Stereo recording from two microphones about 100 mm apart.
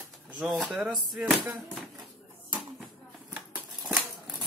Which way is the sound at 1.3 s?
5° right (ahead or behind).